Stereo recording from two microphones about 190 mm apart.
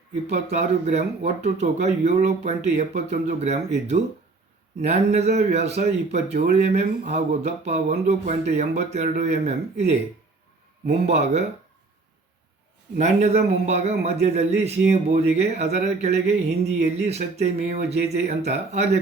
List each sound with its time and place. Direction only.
0.5 s speech: 35° right (ahead or behind)
11.0 s speech: 35° right (ahead or behind)
13.0 s speech: 35° right (ahead or behind)